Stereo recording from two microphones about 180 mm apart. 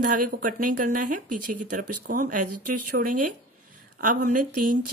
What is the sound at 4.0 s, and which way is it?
Speech, 50° right (ahead or behind).